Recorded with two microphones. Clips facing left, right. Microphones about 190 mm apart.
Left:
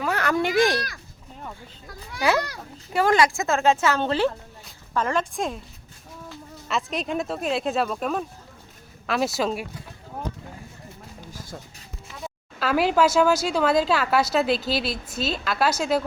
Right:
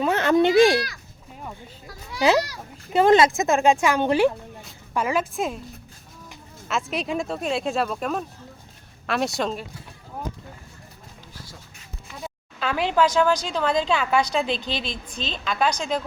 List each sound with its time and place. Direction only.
0.0 s a child's voice: 25° right (ahead or behind)
2.9 s a woman's voice: 20° right (ahead or behind); by 5.5 s 5° right (ahead or behind)
6.7 s speech: centre (ahead or behind)
12.2 s a woman's voice: 5° left (ahead or behind)